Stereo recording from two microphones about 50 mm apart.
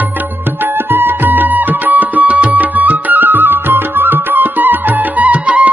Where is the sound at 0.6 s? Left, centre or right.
Right.